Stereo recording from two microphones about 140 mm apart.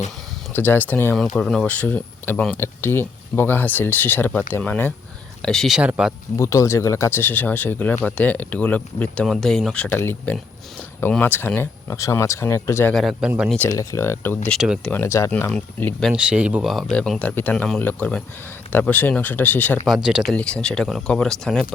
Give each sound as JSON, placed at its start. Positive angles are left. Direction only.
{"t": 0.5, "sound": "speech", "side_deg": 15}
{"t": 1.1, "sound": "speech", "side_deg": 5}
{"t": 6.3, "sound": "speech", "side_deg": 20}
{"t": 12.9, "sound": "speech", "side_deg": 0}
{"t": 13.7, "sound": "speech", "side_deg": 20}
{"t": 15.3, "sound": "speech", "side_deg": 10}
{"t": 16.1, "sound": "speech", "side_deg": -10}
{"t": 16.6, "sound": "speech", "side_deg": 5}
{"t": 19.9, "sound": "speech", "side_deg": -5}
{"t": 20.3, "sound": "speech", "side_deg": 5}